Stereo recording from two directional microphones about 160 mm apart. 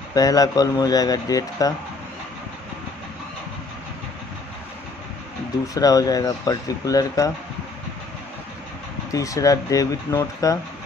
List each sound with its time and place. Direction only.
0.1 s speech: 25° left (ahead or behind)
5.8 s speech: 20° left (ahead or behind)
9.1 s speech: 20° left (ahead or behind)